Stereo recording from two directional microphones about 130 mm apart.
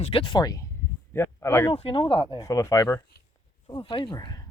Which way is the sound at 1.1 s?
20° left (ahead or behind).